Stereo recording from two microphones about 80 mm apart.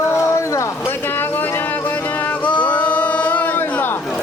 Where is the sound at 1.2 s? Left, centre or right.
Left.